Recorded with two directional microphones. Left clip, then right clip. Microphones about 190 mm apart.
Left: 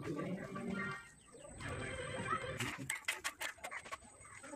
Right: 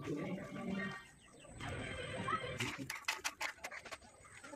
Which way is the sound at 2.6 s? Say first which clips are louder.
Even; 20° left (ahead or behind).